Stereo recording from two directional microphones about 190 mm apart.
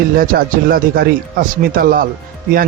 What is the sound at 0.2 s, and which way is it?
Speech, 50° right (ahead or behind).